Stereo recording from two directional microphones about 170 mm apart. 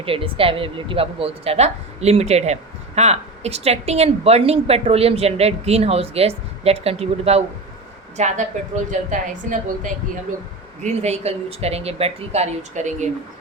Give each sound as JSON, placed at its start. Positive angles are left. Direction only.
{"t": 0.0, "sound": "a woman's voice", "side_deg": -35}